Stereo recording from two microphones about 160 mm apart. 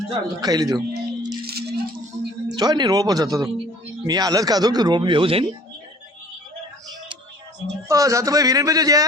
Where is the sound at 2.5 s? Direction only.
25° right (ahead or behind).